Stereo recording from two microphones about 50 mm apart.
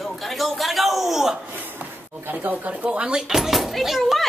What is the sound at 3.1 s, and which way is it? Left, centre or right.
Speech, centre.